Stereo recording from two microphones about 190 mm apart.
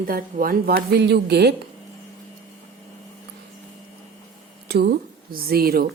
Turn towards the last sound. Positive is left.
turn(degrees=-55)  # may be behind; listen again after turning